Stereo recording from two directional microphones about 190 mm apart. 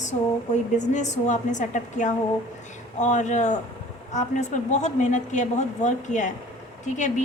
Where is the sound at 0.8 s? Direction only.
40° left (ahead or behind).